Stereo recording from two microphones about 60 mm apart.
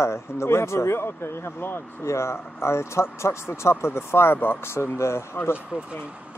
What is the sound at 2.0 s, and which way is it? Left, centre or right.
Speech, left.